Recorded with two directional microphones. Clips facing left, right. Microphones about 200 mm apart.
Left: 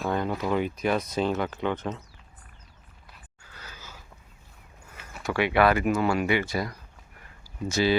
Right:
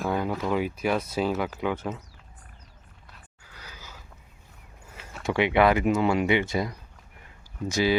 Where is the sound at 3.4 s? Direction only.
15° right (ahead or behind).